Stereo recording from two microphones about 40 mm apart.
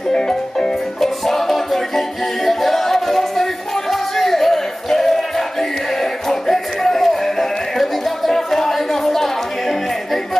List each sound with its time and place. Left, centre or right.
0.1 s music: centre